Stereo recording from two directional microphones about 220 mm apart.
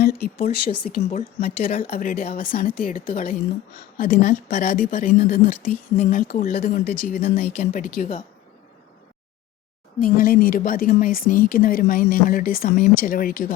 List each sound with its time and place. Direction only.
0.0 s speech: 45° left (ahead or behind)
10.0 s speech: 40° left (ahead or behind)